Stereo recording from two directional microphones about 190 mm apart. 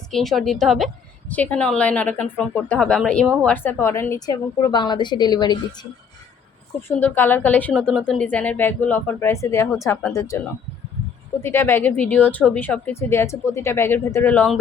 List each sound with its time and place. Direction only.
0.1 s a woman's voice: centre (ahead or behind); by 5.5 s 20° left (ahead or behind)
6.8 s a woman's voice: 10° left (ahead or behind)